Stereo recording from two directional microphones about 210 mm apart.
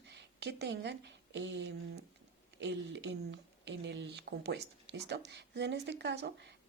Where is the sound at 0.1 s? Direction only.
55° right (ahead or behind).